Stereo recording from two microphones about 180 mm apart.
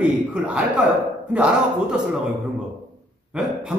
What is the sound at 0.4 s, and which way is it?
Speech, 5° right (ahead or behind).